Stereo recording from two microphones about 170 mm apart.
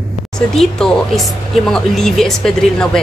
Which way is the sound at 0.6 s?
Centre (ahead or behind).